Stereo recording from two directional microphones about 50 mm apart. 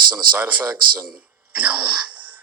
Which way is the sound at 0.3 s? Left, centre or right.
Right.